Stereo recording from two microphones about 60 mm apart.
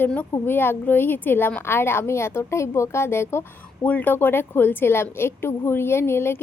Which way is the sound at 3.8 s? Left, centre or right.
Left.